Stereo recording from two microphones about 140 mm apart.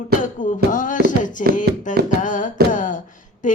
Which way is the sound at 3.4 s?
70° left (ahead or behind).